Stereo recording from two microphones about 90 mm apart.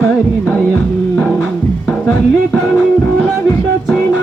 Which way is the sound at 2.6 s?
15° left (ahead or behind).